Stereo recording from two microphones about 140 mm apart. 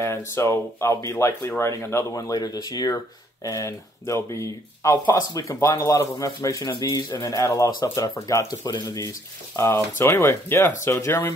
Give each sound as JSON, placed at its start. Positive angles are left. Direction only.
{"t": 0.0, "sound": "speech", "side_deg": 20}